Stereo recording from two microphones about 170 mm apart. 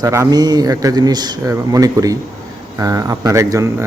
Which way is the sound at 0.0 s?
20° right (ahead or behind).